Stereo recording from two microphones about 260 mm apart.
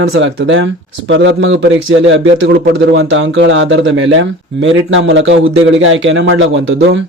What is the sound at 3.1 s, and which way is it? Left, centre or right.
Speech, right.